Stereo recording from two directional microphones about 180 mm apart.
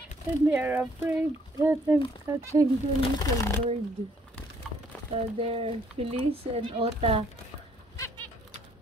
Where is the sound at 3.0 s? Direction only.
20° left (ahead or behind).